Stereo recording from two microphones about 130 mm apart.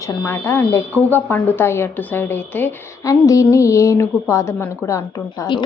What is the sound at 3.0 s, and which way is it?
A woman's voice, 25° left (ahead or behind).